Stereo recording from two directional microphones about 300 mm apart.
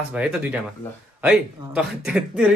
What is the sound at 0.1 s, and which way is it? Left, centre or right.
A man's voice, centre.